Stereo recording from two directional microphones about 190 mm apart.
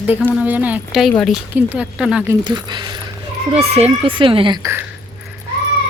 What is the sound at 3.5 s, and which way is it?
Speech, 35° right (ahead or behind).